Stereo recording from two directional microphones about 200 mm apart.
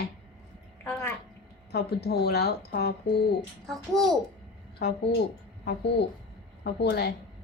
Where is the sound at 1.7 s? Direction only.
55° left (ahead or behind).